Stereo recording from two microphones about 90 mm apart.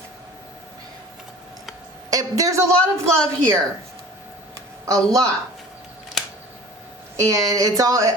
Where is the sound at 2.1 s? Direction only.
40° right (ahead or behind).